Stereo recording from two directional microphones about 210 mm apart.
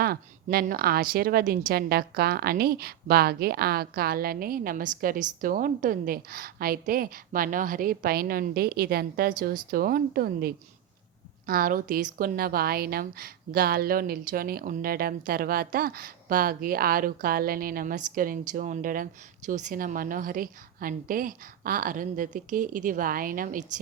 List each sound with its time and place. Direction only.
0.0 s a woman's voice: 45° right (ahead or behind)